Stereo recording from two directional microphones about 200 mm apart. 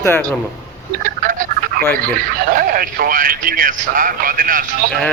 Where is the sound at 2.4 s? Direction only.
45° right (ahead or behind).